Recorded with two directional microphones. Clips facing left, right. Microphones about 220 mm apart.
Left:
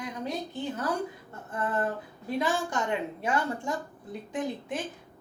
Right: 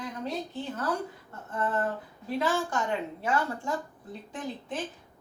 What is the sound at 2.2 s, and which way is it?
A woman's voice, 15° left (ahead or behind).